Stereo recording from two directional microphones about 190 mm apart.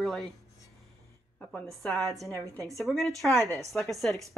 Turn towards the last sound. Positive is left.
turn(degrees=0)  # may be behind; listen again after turning